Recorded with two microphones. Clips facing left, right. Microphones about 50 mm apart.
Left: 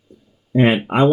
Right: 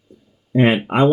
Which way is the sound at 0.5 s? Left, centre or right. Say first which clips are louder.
Even; right.